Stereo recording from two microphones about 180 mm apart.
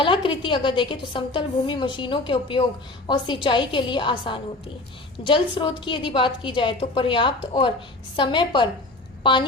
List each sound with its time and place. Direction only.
0.0 s a woman's voice: 30° left (ahead or behind)